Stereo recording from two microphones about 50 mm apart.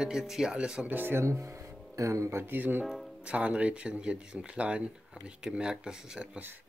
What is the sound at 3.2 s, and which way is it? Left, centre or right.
Speech, right.